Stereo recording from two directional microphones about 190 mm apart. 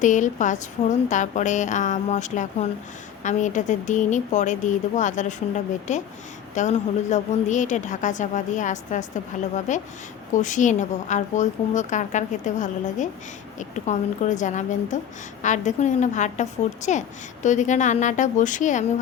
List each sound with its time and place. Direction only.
0.0 s a woman's voice: 40° left (ahead or behind)